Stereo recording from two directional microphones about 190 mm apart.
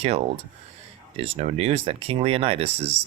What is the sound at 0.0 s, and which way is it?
Speech, 30° right (ahead or behind).